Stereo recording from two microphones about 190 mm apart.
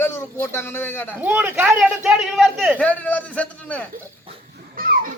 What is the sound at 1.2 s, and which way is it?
A man's voice, 10° right (ahead or behind).